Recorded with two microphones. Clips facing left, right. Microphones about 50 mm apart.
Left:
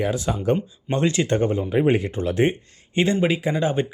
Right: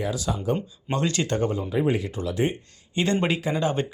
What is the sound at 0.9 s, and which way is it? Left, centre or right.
Speech, left.